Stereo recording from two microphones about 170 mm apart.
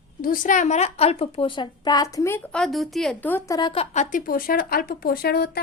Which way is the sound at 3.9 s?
50° left (ahead or behind).